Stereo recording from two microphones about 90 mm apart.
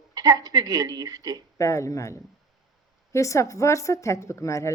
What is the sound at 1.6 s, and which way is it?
A woman's voice, 35° left (ahead or behind).